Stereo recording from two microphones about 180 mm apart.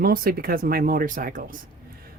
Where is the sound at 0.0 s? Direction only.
55° right (ahead or behind).